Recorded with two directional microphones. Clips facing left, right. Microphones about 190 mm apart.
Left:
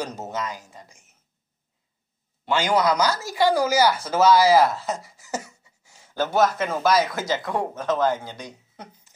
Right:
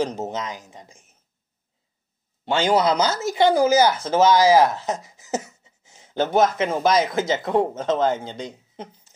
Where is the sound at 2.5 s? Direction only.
25° right (ahead or behind).